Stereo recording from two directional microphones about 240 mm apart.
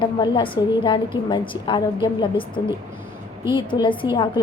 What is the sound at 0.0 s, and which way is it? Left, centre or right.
A woman's voice, centre.